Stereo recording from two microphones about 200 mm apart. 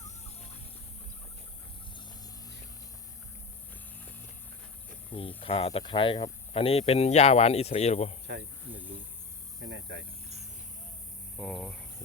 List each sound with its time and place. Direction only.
5.4 s speech: 30° left (ahead or behind)
9.6 s speech: 60° right (ahead or behind)
11.3 s speech: 5° left (ahead or behind)